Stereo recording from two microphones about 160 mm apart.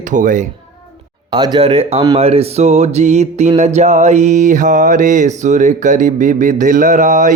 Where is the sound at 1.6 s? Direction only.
40° right (ahead or behind).